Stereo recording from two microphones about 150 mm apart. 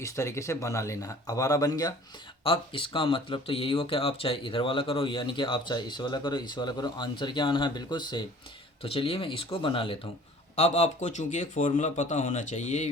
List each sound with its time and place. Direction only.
0.0 s speech: 20° left (ahead or behind)
2.4 s speech: 35° left (ahead or behind)
10.5 s a man's voice: 45° left (ahead or behind)